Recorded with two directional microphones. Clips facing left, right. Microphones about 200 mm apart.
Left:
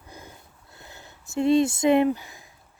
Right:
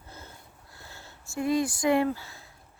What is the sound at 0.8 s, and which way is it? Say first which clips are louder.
Speech: left 2 dB; 20° left (ahead or behind).